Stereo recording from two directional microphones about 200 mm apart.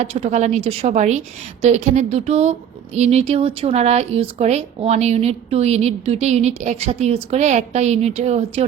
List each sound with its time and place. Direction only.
0.0 s speech: 35° right (ahead or behind)